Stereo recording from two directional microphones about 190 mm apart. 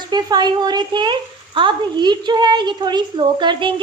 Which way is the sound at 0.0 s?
20° right (ahead or behind).